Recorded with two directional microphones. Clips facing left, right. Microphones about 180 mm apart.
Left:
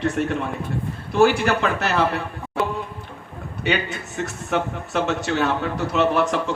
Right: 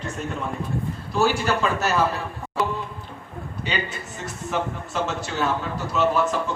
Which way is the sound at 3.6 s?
70° left (ahead or behind).